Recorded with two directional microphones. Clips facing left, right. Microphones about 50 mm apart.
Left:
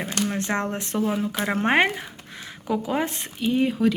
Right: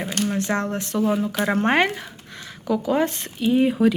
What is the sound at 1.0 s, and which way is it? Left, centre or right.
Speech, centre.